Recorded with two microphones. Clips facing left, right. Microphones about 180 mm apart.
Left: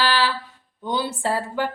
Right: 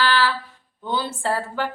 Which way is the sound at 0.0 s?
15° left (ahead or behind).